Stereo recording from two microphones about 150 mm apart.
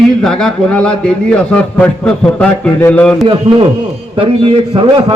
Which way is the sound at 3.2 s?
30° right (ahead or behind).